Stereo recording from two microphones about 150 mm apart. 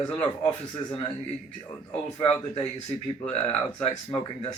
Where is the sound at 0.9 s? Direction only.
35° left (ahead or behind).